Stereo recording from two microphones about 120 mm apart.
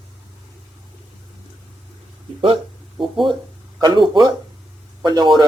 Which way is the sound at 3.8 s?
40° right (ahead or behind).